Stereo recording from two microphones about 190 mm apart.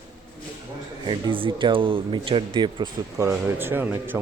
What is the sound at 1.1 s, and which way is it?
Speech, 25° right (ahead or behind).